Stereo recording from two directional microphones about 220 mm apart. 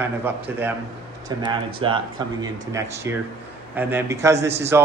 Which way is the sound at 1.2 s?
20° right (ahead or behind).